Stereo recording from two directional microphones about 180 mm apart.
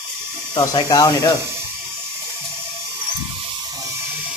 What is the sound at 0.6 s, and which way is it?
Speech, 25° left (ahead or behind).